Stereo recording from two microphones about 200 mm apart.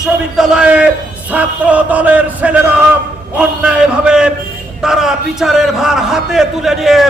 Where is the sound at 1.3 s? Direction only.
5° right (ahead or behind).